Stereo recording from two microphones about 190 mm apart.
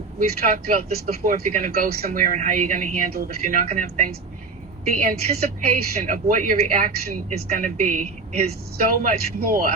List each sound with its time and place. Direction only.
0.2 s speech: 50° right (ahead or behind)
9.0 s speech: 50° right (ahead or behind)